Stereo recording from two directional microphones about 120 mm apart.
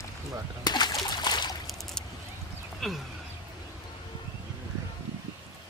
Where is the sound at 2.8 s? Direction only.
Centre (ahead or behind).